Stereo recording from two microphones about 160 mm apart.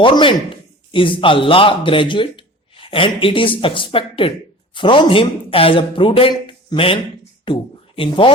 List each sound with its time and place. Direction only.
0.0 s speech: 30° left (ahead or behind)